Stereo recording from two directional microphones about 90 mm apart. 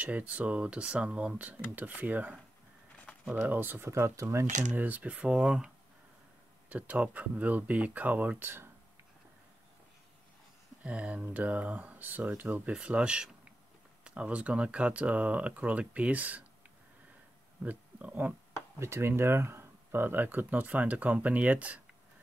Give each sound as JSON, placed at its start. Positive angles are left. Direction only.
{"t": 0.0, "sound": "speech", "side_deg": -15}
{"t": 4.7, "sound": "speech", "side_deg": -20}
{"t": 6.7, "sound": "speech", "side_deg": -15}
{"t": 10.8, "sound": "speech", "side_deg": -15}
{"t": 17.6, "sound": "speech", "side_deg": -15}
{"t": 18.8, "sound": "speech", "side_deg": -30}